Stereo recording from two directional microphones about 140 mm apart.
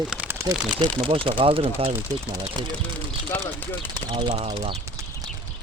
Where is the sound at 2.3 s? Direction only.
25° right (ahead or behind).